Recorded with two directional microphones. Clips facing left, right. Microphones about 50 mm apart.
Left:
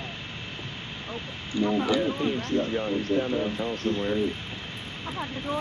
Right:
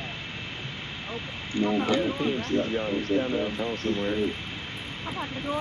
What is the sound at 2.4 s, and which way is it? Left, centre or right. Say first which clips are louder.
Speech: even; centre.